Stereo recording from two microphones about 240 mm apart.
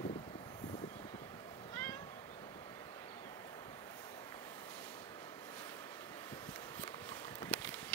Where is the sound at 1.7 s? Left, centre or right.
Centre.